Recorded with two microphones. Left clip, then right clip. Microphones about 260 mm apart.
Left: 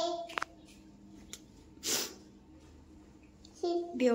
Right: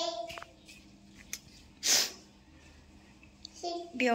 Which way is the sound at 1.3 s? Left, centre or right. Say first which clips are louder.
Right 7 dB; centre.